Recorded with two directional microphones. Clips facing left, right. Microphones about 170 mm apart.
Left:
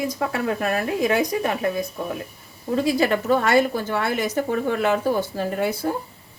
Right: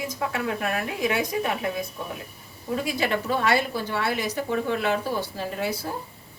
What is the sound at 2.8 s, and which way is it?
A woman's voice, 40° left (ahead or behind).